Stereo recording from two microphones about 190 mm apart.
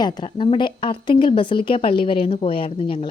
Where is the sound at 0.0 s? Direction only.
25° left (ahead or behind).